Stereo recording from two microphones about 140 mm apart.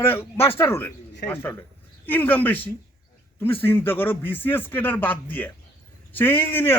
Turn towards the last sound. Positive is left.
turn(degrees=15)  # may be behind; listen again after turning